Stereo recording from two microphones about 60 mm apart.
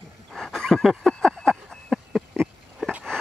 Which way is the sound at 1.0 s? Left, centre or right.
Centre.